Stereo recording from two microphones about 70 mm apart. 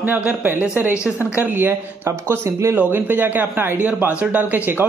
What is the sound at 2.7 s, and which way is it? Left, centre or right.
Speech, right.